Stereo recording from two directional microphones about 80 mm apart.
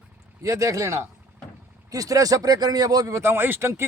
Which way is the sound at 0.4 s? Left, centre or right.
Right.